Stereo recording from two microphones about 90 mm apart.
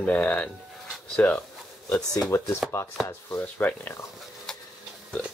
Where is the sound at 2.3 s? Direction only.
30° left (ahead or behind).